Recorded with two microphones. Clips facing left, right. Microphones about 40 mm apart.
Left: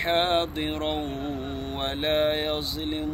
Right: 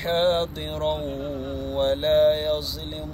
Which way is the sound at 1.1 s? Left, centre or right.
Left.